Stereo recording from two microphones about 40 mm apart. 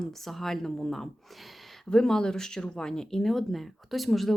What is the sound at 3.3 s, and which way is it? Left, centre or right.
Speech, centre.